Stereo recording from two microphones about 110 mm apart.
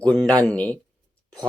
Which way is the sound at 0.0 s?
5° left (ahead or behind).